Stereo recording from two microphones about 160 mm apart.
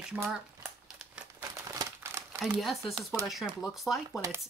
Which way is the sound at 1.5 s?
20° right (ahead or behind).